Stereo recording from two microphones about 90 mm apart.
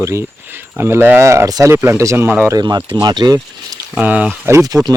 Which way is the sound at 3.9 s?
15° right (ahead or behind).